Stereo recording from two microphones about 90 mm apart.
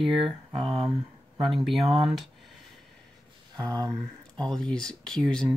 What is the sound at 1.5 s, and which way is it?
Speech, centre (ahead or behind).